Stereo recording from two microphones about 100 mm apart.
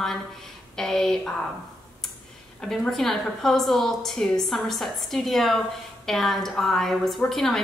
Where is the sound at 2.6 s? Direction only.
5° left (ahead or behind).